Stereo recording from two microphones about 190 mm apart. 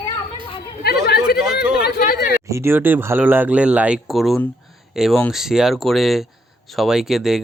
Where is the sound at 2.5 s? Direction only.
15° right (ahead or behind).